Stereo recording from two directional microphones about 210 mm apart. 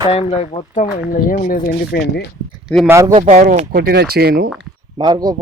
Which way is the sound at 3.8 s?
50° right (ahead or behind).